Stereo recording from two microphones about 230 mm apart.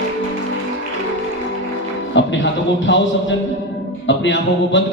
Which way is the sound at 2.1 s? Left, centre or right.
Left.